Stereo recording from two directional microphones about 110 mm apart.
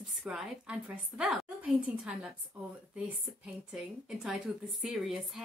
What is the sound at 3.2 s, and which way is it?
A woman's voice, 5° right (ahead or behind).